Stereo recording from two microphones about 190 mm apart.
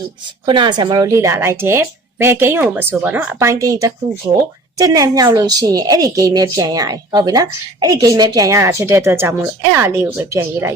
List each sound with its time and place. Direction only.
0.4 s a woman's voice: 25° right (ahead or behind)